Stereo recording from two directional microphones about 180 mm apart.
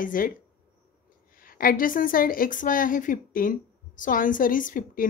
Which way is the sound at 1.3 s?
50° left (ahead or behind).